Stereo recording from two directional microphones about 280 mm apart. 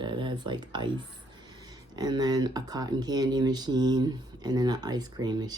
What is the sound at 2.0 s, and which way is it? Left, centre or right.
Speech, centre.